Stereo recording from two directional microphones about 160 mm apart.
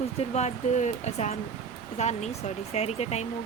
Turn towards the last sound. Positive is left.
turn(degrees=45)  # may be behind; listen again after turning